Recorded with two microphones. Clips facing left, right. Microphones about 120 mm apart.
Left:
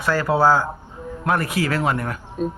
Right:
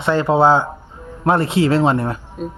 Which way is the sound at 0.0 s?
25° right (ahead or behind).